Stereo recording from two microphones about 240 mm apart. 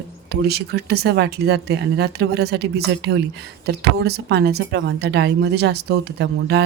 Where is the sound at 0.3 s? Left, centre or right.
Right.